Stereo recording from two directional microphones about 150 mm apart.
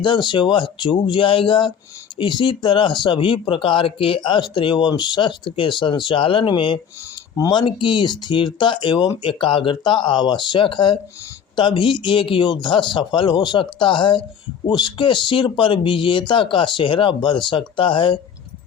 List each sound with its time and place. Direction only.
0.0 s speech: 30° left (ahead or behind)
7.3 s speech: 20° left (ahead or behind)
7.6 s speech: 30° left (ahead or behind)